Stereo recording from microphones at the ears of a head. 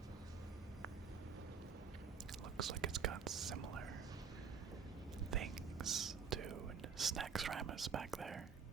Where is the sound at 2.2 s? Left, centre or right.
Right.